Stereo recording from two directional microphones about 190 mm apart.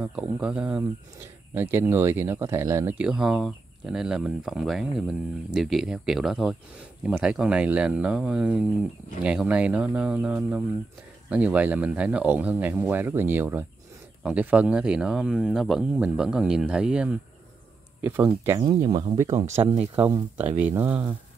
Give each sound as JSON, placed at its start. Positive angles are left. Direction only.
{"t": 0.0, "sound": "speech", "side_deg": -5}
{"t": 18.6, "sound": "speech", "side_deg": -20}
{"t": 20.0, "sound": "speech", "side_deg": -10}